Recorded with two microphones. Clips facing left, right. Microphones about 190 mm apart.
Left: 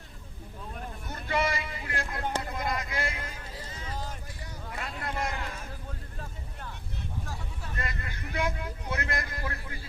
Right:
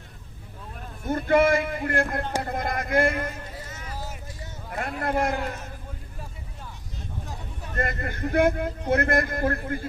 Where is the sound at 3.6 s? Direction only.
25° left (ahead or behind).